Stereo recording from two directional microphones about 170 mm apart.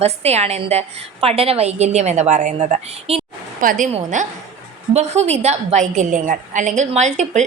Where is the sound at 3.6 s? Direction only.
50° right (ahead or behind).